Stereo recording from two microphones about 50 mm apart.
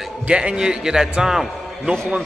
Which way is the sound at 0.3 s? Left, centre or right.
Centre.